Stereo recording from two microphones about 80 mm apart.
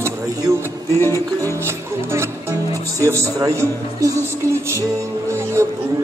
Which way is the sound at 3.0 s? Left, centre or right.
Right.